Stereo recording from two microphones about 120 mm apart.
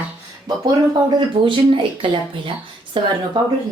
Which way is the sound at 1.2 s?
40° right (ahead or behind).